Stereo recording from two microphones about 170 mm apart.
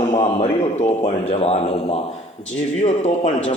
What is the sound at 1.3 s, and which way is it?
Speech, 35° left (ahead or behind).